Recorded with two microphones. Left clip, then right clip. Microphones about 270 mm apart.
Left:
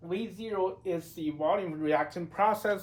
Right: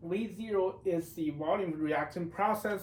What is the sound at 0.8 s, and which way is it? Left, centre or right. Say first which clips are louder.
Speech: right 1 dB; centre.